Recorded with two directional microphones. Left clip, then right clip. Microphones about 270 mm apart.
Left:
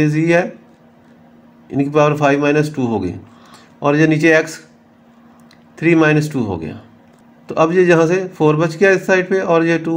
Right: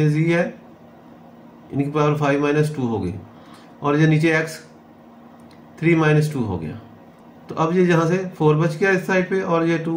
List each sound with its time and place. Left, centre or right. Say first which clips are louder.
0.0 s speech: left 6 dB; left
1.7 s speech: left 7 dB; left
5.8 s speech: left 5 dB; left